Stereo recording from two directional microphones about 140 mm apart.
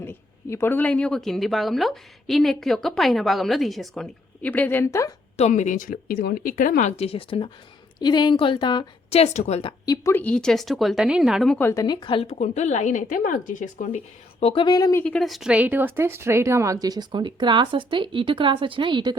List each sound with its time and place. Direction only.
0.0 s speech: 15° left (ahead or behind)
5.4 s speech: 60° left (ahead or behind)
6.9 s a woman's voice: 45° left (ahead or behind)
9.0 s a woman's voice: 45° left (ahead or behind)
9.6 s speech: 25° left (ahead or behind); by 11.5 s centre (ahead or behind)
11.5 s a woman's voice: 20° left (ahead or behind); by 14.4 s 65° left (ahead or behind)
14.4 s speech: 35° left (ahead or behind)
15.0 s a woman's voice: 5° left (ahead or behind); by 19.1 s 35° right (ahead or behind)